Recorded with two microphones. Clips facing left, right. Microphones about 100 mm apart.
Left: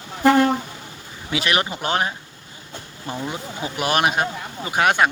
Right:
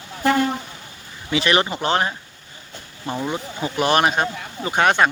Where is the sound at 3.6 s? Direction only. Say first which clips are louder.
Right 3 dB; 5° left (ahead or behind).